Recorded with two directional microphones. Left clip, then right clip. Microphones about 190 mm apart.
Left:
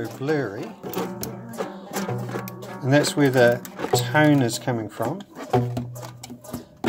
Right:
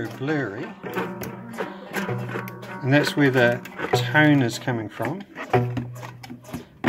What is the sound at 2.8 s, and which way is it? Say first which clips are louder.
Speech: even; 10° left (ahead or behind).